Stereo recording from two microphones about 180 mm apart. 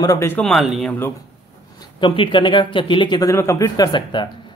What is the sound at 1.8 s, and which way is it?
Speech, 30° left (ahead or behind).